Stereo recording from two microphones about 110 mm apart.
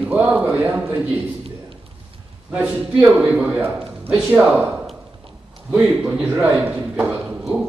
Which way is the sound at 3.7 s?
55° right (ahead or behind).